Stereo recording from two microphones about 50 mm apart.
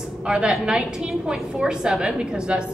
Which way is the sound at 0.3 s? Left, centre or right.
Centre.